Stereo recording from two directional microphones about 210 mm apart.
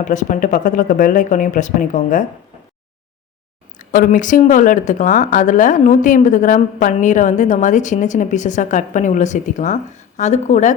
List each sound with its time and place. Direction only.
0.0 s speech: 35° left (ahead or behind)
3.8 s speech: 40° left (ahead or behind)